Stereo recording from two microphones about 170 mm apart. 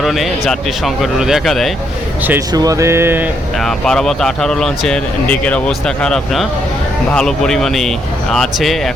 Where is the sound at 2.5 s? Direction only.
20° right (ahead or behind).